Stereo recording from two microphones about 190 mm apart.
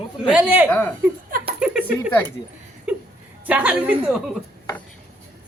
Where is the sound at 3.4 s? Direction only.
5° right (ahead or behind).